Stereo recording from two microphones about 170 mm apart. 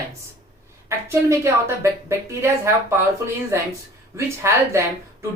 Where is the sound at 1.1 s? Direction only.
15° right (ahead or behind).